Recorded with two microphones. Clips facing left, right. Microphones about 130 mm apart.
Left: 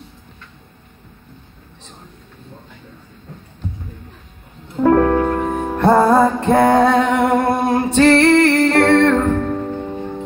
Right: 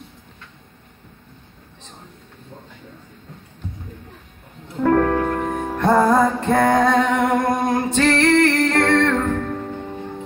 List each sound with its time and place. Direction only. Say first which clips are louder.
4.8 s music: left 4 dB; 25° left (ahead or behind)